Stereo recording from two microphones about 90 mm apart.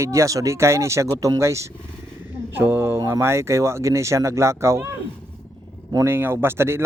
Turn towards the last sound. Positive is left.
turn(degrees=-30)  # may be behind; listen again after turning